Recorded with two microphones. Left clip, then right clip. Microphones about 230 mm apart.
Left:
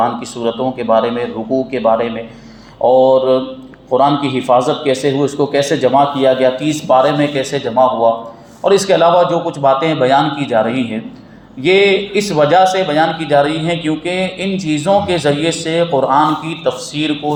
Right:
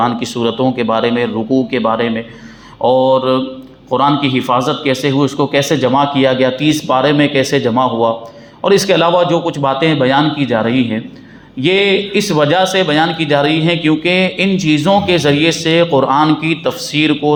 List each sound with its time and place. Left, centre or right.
0.0 s a man's voice: right